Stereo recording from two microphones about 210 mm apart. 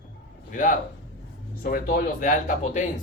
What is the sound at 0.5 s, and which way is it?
Speech, 40° left (ahead or behind).